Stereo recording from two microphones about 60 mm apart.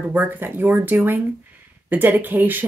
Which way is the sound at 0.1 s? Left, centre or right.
Right.